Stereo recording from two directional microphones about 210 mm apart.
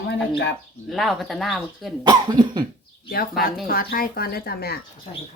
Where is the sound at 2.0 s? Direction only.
20° right (ahead or behind).